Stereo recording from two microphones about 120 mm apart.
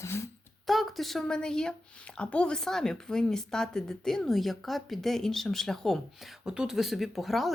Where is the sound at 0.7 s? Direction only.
Centre (ahead or behind).